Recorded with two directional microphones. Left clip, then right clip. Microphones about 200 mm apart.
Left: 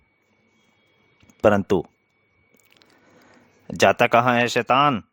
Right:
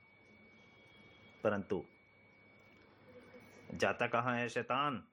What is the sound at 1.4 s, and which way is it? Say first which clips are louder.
Speech: left 18 dB; 60° left (ahead or behind).